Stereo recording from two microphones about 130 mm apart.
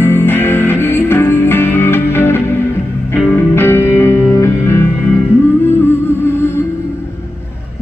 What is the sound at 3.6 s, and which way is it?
Music, 15° left (ahead or behind).